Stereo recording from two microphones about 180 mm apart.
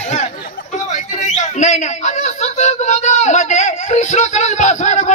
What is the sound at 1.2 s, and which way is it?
Speech, 40° left (ahead or behind).